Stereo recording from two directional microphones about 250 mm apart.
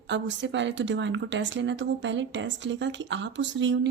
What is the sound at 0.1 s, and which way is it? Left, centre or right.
Speech, right.